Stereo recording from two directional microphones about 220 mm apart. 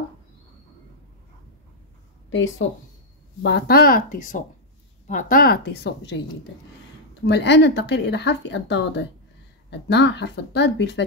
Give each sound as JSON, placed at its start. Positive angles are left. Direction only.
{"t": 2.2, "sound": "a sound", "side_deg": 60}
{"t": 3.4, "sound": "speech", "side_deg": 45}
{"t": 7.2, "sound": "speech", "side_deg": 55}